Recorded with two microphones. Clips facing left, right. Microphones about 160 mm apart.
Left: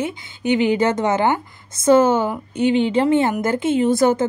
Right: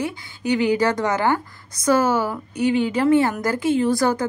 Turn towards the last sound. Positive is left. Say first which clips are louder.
# left 3 dB
turn(degrees=20)  # may be behind; listen again after turning